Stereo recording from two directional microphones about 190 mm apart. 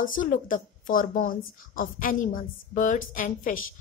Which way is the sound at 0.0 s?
45° left (ahead or behind).